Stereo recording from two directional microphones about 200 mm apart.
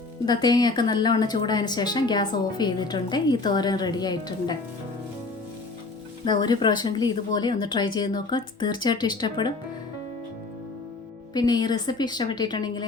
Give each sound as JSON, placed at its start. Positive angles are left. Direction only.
{"t": 0.3, "sound": "speech", "side_deg": 20}
{"t": 6.2, "sound": "speech", "side_deg": 20}
{"t": 11.3, "sound": "speech", "side_deg": 20}